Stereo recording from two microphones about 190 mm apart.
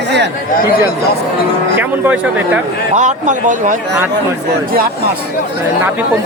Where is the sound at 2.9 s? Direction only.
40° right (ahead or behind).